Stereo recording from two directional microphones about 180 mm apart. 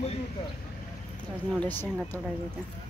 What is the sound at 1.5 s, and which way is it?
Speech, 10° left (ahead or behind).